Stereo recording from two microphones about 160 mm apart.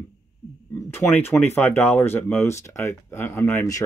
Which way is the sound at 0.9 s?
15° left (ahead or behind).